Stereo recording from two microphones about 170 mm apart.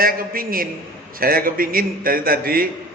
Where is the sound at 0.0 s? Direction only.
55° right (ahead or behind).